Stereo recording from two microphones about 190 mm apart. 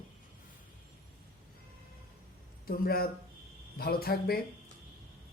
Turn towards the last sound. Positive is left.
turn(degrees=55)  # may be behind; listen again after turning